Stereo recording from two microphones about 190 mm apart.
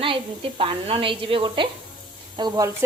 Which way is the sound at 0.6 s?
30° right (ahead or behind).